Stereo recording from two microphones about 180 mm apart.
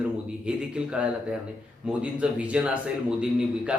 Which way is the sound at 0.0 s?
5° right (ahead or behind).